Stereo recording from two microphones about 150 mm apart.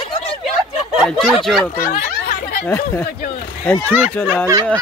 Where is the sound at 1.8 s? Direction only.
80° left.